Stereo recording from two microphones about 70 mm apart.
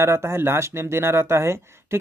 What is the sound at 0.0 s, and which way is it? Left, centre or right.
Speech, right.